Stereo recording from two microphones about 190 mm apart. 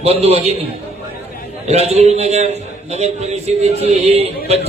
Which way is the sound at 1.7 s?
35° right (ahead or behind).